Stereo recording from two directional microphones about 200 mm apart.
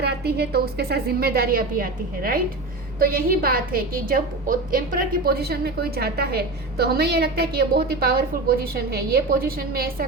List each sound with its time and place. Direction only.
0.0 s a woman's voice: 50° right (ahead or behind)